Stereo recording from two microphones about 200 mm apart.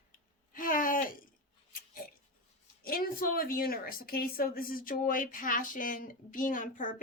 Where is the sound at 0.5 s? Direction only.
45° left (ahead or behind).